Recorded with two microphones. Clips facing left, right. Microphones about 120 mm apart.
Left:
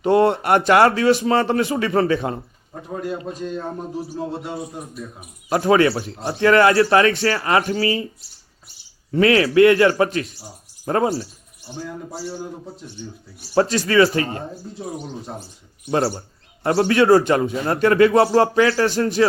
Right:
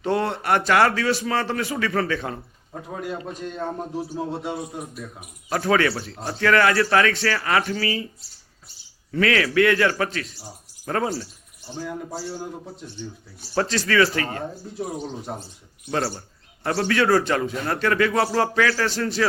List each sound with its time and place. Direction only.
0.0 s a man's voice: 20° left (ahead or behind)
2.9 s a man's voice: centre (ahead or behind)
5.5 s a man's voice: 20° left (ahead or behind)
9.1 s a man's voice: 25° left (ahead or behind)
12.3 s a man's voice: centre (ahead or behind)
13.6 s a man's voice: 25° left (ahead or behind)
15.9 s a man's voice: 20° left (ahead or behind)